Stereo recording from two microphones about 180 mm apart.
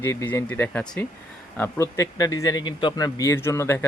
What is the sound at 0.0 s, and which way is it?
Speech, 15° left (ahead or behind).